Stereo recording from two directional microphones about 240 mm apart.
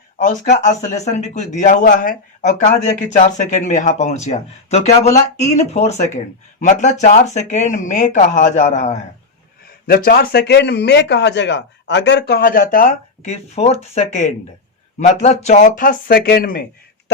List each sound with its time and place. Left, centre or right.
0.3 s speech: left